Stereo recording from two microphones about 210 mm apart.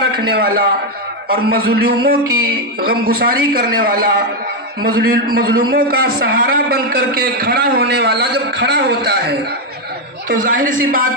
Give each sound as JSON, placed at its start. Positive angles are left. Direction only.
{"t": 0.3, "sound": "a man's voice", "side_deg": -45}
{"t": 1.8, "sound": "a man's voice", "side_deg": -50}